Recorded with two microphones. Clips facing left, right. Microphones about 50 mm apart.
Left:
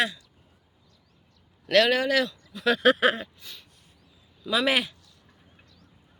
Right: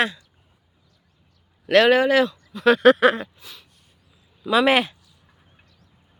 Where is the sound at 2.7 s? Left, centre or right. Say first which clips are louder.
Right 5 dB; right.